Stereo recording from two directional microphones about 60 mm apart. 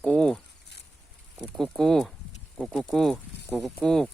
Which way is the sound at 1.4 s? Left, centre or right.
Centre.